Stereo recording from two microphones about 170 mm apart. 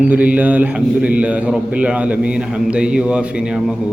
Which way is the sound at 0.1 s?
10° right (ahead or behind).